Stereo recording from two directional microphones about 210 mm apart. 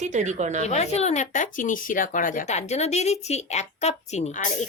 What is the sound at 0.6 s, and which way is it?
Speech, 30° left (ahead or behind).